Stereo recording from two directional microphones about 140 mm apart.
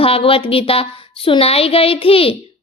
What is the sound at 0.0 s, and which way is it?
A woman's voice, 40° left (ahead or behind).